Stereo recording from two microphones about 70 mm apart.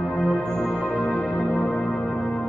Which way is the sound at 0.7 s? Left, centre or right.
Centre.